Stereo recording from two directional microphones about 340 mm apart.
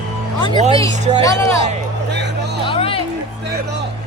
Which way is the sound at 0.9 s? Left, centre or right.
Centre.